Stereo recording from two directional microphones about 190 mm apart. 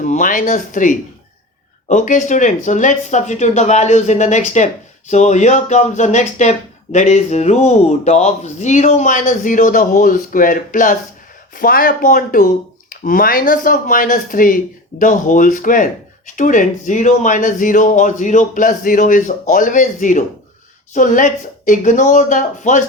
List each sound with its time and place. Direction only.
0.0 s speech: 45° left (ahead or behind)